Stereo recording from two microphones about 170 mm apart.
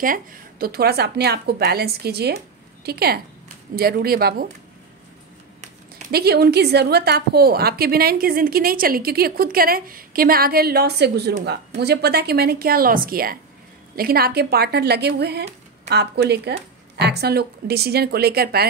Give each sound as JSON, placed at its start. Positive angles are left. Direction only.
{"t": 0.0, "sound": "a woman's voice", "side_deg": -55}
{"t": 6.1, "sound": "a woman's voice", "side_deg": -70}